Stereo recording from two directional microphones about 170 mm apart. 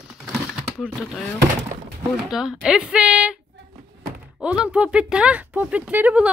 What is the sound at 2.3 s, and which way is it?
Speech, 5° right (ahead or behind).